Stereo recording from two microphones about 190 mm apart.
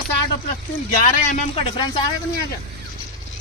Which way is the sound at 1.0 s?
40° left (ahead or behind).